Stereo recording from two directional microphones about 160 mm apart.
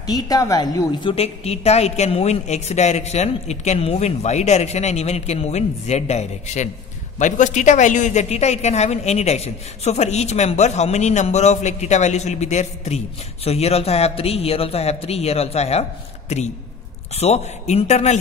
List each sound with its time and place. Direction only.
0.0 s a woman's voice: 25° left (ahead or behind)
1.1 s a woman's voice: 40° left (ahead or behind)
17.1 s a man's voice: 40° left (ahead or behind)